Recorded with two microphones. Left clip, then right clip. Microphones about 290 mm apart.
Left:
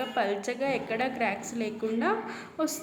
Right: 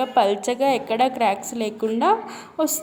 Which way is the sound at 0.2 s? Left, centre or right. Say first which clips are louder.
Right 10 dB; right.